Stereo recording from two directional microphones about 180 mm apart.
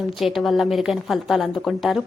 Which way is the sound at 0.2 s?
Centre (ahead or behind).